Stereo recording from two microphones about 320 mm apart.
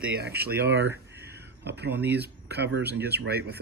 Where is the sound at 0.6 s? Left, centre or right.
Right.